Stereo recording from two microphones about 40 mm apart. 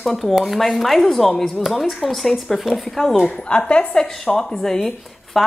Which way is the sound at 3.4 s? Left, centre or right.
Left.